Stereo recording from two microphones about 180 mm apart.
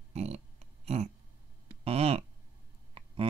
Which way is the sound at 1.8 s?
35° right (ahead or behind).